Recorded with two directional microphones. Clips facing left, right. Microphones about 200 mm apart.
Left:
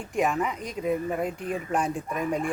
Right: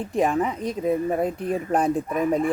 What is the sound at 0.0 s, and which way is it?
Speech, 35° right (ahead or behind).